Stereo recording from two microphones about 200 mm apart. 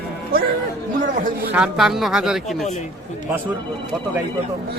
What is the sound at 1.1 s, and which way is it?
Speech, 45° right (ahead or behind).